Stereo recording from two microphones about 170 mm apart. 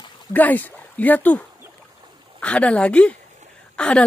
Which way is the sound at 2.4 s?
10° left (ahead or behind).